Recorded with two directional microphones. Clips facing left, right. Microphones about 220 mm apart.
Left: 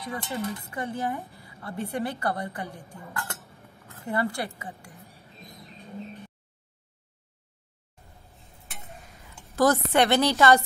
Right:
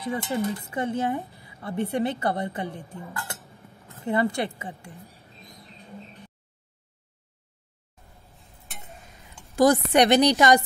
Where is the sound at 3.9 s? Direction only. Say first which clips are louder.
Right 4 dB; 20° right (ahead or behind).